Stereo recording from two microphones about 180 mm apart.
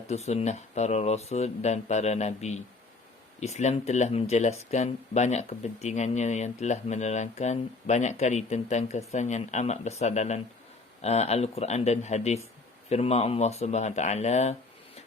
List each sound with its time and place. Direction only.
0.1 s speech: 35° left (ahead or behind)